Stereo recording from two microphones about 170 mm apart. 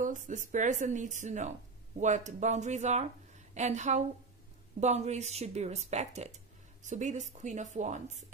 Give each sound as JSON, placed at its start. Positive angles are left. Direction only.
{"t": 0.0, "sound": "a woman's voice", "side_deg": -50}